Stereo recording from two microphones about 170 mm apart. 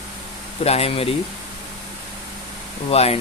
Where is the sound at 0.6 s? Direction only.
35° left (ahead or behind).